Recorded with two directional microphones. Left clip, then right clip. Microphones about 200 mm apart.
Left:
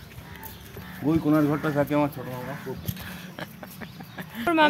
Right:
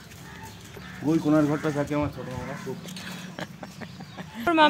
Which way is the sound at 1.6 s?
55° left (ahead or behind).